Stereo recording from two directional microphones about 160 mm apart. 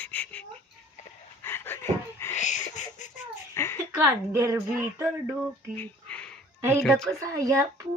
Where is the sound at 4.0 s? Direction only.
15° right (ahead or behind).